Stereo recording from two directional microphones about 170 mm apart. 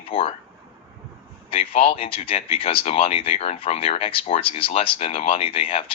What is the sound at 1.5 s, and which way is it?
Speech, 35° left (ahead or behind).